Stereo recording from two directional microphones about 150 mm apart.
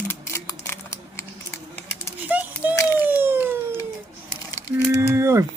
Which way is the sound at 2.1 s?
10° right (ahead or behind).